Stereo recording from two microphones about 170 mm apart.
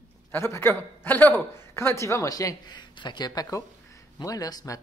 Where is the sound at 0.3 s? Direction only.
15° left (ahead or behind).